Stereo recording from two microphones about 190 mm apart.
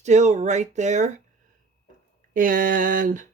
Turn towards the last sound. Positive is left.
turn(degrees=-45)  # may be behind; listen again after turning